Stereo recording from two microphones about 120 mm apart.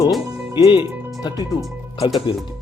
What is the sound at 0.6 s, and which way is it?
Speech, 40° left (ahead or behind).